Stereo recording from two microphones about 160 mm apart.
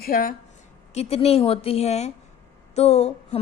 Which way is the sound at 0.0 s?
60° left (ahead or behind).